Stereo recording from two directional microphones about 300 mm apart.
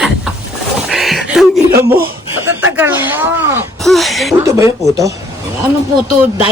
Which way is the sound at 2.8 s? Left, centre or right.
Centre.